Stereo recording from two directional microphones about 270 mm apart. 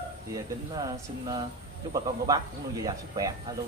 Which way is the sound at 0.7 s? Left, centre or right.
Centre.